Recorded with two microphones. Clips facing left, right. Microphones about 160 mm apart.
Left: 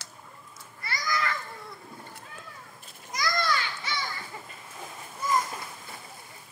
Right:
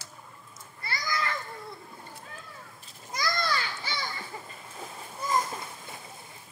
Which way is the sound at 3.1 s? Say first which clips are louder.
Left 2 dB; 30° right (ahead or behind).